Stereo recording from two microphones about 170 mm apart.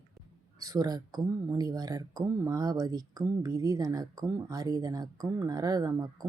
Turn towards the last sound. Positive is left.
turn(degrees=-20)  # may be behind; listen again after turning